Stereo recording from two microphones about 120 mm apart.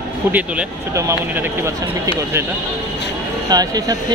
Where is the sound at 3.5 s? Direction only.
30° right (ahead or behind).